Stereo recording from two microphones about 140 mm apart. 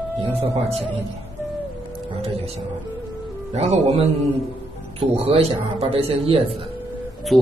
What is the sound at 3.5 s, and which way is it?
Speech, 50° right (ahead or behind).